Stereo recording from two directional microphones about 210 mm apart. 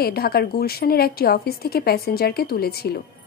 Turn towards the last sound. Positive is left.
turn(degrees=50)  # may be behind; listen again after turning